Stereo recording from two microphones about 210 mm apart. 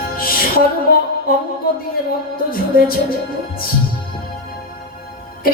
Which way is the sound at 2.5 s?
45° left (ahead or behind).